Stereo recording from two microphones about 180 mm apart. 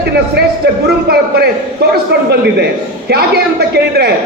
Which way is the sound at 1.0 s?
60° right (ahead or behind).